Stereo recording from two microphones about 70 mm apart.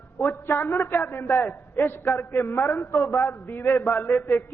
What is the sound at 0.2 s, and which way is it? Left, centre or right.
A man's voice, left.